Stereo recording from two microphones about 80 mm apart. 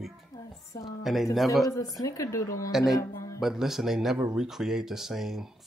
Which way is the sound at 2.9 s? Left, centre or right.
Left.